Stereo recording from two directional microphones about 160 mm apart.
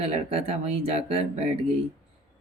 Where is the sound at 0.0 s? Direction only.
40° right (ahead or behind).